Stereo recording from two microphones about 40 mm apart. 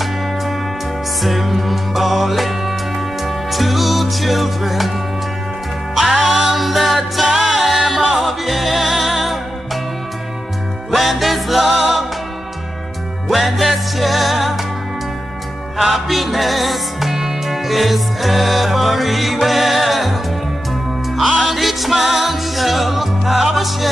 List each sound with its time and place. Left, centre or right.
1.2 s music: centre
5.9 s music: centre
10.9 s music: centre
13.3 s music: centre
15.8 s music: centre
21.2 s music: centre